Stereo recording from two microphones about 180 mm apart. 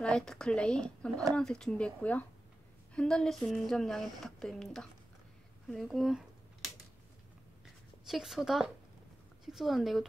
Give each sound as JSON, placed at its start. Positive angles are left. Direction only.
{"t": 0.0, "sound": "speech", "side_deg": 5}
{"t": 2.9, "sound": "speech", "side_deg": 5}
{"t": 5.7, "sound": "a sound", "side_deg": 0}
{"t": 9.5, "sound": "speech", "side_deg": 0}